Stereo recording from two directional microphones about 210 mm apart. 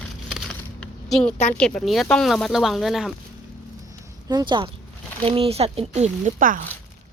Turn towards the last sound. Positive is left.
turn(degrees=-40)  # may be behind; listen again after turning